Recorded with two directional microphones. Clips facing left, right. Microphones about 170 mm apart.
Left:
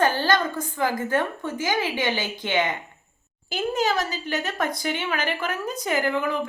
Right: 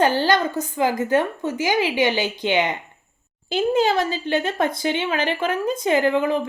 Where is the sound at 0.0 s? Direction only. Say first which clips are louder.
Right 3 dB; 20° right (ahead or behind).